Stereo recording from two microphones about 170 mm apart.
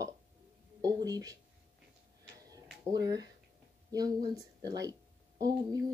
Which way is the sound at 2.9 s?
20° right (ahead or behind).